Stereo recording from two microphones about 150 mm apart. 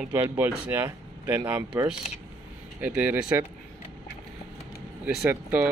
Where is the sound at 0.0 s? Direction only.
15° right (ahead or behind).